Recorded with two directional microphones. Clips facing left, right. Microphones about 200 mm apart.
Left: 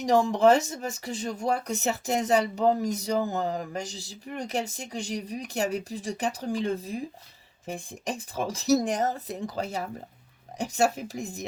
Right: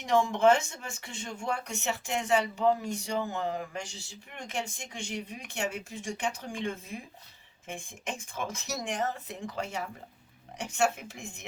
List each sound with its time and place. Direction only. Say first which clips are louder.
0.0 s speech: left 3 dB; 35° left (ahead or behind)